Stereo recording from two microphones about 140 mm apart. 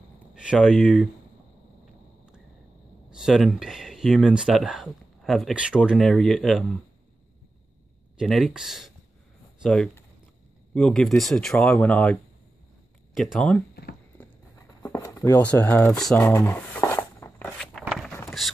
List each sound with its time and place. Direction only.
0.3 s speech: 5° right (ahead or behind)
3.1 s speech: 5° right (ahead or behind)
8.2 s speech: centre (ahead or behind)
14.8 s a sound: 20° left (ahead or behind)
15.4 s speech: 10° left (ahead or behind)
16.9 s a sound: 20° left (ahead or behind)
17.5 s walk: 5° left (ahead or behind)